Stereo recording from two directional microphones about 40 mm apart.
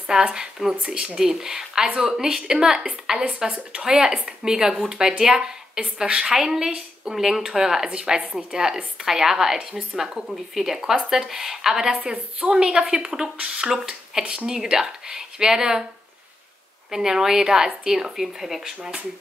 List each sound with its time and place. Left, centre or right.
0.2 s a woman's voice: right
3.4 s a woman's voice: right
3.8 s speech: centre
12.0 s a woman's voice: right
16.9 s speech: centre